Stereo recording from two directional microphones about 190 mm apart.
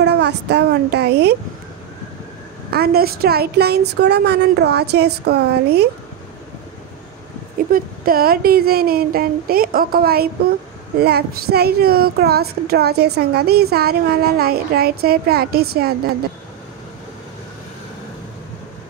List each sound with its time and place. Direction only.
0.0 s a woman's voice: 60° right (ahead or behind)
2.7 s speech: 55° right (ahead or behind)
7.7 s speech: 50° right (ahead or behind)